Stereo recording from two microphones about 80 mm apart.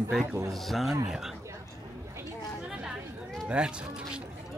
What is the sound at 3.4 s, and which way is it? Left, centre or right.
Speech, centre.